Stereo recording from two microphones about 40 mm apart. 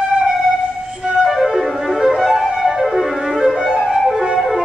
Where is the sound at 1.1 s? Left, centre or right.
Centre.